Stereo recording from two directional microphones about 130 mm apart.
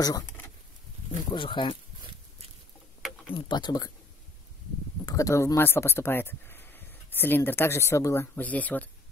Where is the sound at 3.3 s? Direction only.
35° left (ahead or behind).